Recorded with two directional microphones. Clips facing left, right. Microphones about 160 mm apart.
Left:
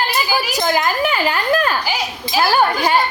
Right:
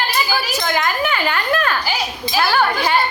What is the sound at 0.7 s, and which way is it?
Speech, 35° left (ahead or behind).